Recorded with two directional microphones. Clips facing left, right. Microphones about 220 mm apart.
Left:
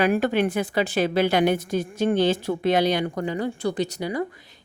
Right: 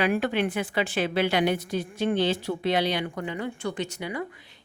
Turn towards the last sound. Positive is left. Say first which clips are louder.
# left 5 dB
turn(degrees=40)  # may be behind; listen again after turning